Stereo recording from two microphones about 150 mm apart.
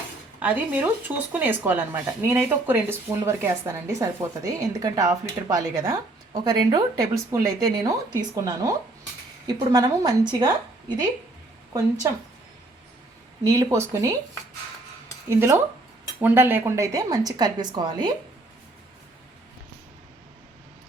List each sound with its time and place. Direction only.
0.3 s speech: 10° right (ahead or behind); by 11.1 s 30° right (ahead or behind)
13.4 s speech: 20° right (ahead or behind)
15.3 s speech: 15° right (ahead or behind)